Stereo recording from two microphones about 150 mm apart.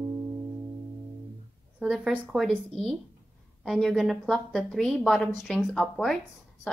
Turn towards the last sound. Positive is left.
turn(degrees=5)  # may be behind; listen again after turning